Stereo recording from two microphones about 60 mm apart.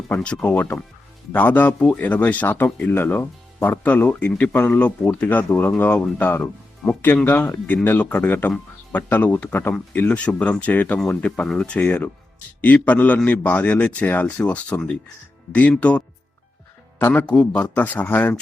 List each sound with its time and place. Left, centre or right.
0.2 s a man's voice: centre
1.3 s a man's voice: left
6.8 s speech: centre
7.3 s a man's voice: left
17.0 s a man's voice: left